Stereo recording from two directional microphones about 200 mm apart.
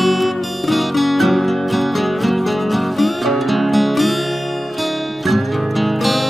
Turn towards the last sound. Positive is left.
turn(degrees=0)  # may be behind; listen again after turning